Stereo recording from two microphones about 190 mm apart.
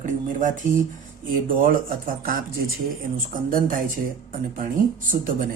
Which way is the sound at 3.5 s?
45° right (ahead or behind).